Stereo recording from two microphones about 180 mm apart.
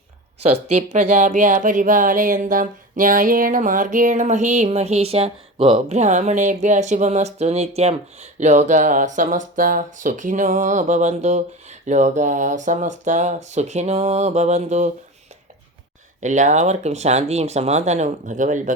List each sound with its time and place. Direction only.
0.4 s speech: 35° right (ahead or behind)
16.2 s speech: 40° right (ahead or behind)